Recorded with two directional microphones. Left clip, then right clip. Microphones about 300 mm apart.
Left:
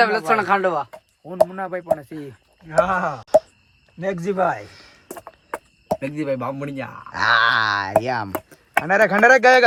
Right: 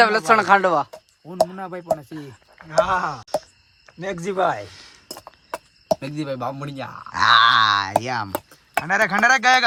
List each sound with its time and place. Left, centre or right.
0.0 s speech: right
1.3 s speech: centre
4.0 s speech: right
4.6 s speech: centre
6.0 s speech: centre